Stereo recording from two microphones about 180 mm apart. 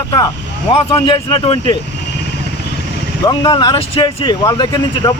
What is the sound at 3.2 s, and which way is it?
Speech, 20° left (ahead or behind).